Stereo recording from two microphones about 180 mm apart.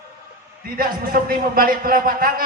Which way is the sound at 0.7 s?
55° right (ahead or behind).